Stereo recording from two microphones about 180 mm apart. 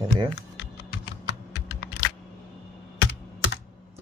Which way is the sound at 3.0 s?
90° left.